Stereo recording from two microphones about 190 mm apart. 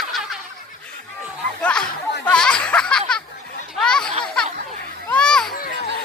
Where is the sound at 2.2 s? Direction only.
5° left (ahead or behind).